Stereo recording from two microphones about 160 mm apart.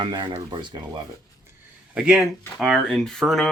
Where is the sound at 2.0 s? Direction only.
5° right (ahead or behind).